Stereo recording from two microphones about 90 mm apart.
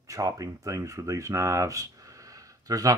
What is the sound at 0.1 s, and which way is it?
Speech, 40° right (ahead or behind).